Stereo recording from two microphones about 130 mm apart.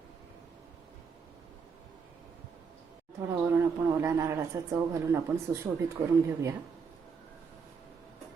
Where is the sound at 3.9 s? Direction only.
20° right (ahead or behind).